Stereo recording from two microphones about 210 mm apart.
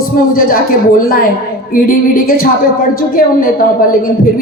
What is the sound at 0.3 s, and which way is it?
Speech, 45° left (ahead or behind).